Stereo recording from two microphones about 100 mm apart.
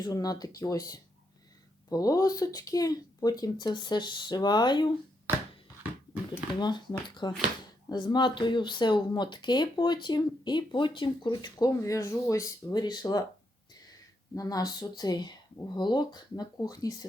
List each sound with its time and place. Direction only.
0.0 s speech: 40° left (ahead or behind)
6.6 s speech: 45° left (ahead or behind)
14.3 s speech: 35° left (ahead or behind)